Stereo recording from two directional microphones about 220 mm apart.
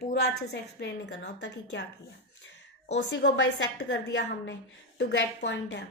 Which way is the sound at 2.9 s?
55° left (ahead or behind).